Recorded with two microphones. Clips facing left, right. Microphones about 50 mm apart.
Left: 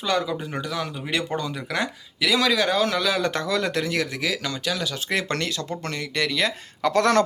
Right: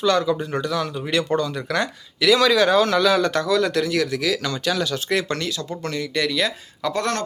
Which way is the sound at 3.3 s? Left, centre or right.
Left.